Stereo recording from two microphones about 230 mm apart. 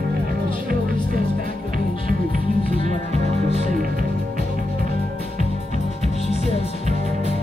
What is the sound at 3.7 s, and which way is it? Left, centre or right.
Music, right.